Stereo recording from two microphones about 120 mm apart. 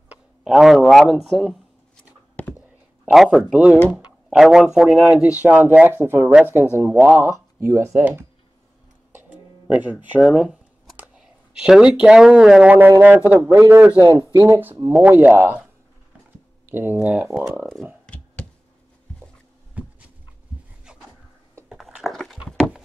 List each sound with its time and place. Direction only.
0.1 s speech: 5° right (ahead or behind)
3.1 s a man's voice: 5° right (ahead or behind)
7.6 s speech: 20° right (ahead or behind)
9.1 s music: 10° right (ahead or behind)
10.0 s a man's voice: 10° right (ahead or behind)
14.3 s speech: 25° right (ahead or behind)
14.9 s a man's voice: 15° right (ahead or behind)
18.0 s a sound: 10° left (ahead or behind)
19.8 s a sound: 10° right (ahead or behind)
21.6 s a sound: centre (ahead or behind)